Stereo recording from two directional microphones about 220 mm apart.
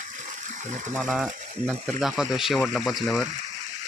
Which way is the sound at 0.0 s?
35° right (ahead or behind).